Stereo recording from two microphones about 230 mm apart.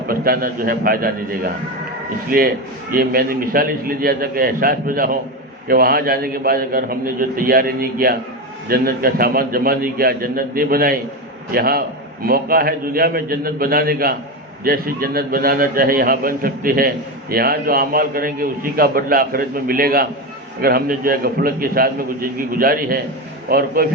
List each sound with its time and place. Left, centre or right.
0.1 s a man's voice: right